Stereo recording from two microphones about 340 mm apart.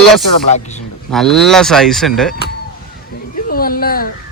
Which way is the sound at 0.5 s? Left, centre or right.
Centre.